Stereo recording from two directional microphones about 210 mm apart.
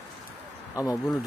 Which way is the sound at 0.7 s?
15° left (ahead or behind).